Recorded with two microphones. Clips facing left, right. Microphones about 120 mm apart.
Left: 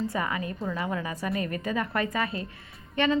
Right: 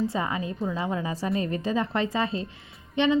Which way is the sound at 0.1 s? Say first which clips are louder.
Right 1 dB; 25° right (ahead or behind).